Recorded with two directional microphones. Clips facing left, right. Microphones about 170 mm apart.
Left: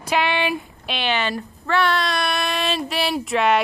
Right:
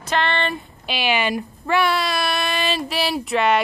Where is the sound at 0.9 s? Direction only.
10° right (ahead or behind).